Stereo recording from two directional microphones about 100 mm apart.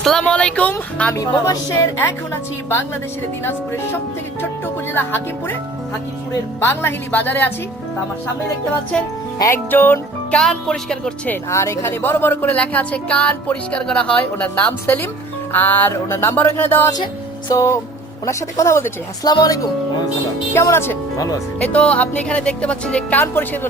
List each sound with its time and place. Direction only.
0.0 s speech: 5° left (ahead or behind)
1.1 s speech: 35° left (ahead or behind)
4.9 s music: 20° left (ahead or behind)
6.6 s music: 25° left (ahead or behind)
9.6 s music: 20° left (ahead or behind)
10.3 s speech: 10° left (ahead or behind)
11.4 s speech: 30° left (ahead or behind)
15.5 s music: 20° left (ahead or behind)
17.5 s speech: 30° left (ahead or behind)
19.3 s speech: 45° left (ahead or behind)
20.5 s music: 25° left (ahead or behind)
21.2 s speech: 35° left (ahead or behind)
21.6 s speech: 10° left (ahead or behind)
23.2 s music: 20° left (ahead or behind)